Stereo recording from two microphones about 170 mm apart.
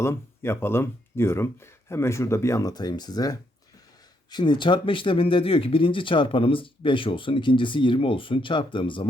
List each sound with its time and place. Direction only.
0.0 s speech: 15° left (ahead or behind)